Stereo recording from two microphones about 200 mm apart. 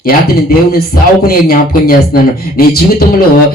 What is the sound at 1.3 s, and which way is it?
A man's voice, 50° left (ahead or behind).